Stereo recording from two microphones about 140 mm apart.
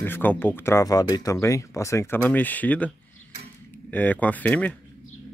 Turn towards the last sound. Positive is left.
turn(degrees=10)  # may be behind; listen again after turning